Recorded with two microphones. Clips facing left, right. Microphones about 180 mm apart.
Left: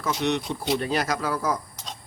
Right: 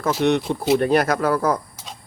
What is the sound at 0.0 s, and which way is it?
Speech, 55° right (ahead or behind).